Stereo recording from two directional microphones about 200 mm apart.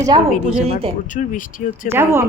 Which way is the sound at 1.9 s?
10° right (ahead or behind).